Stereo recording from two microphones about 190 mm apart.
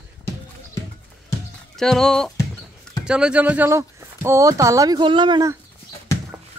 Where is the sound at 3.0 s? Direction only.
5° right (ahead or behind); by 5.5 s 25° right (ahead or behind).